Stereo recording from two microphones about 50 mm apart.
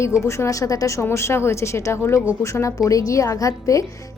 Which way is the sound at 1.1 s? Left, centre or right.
Left.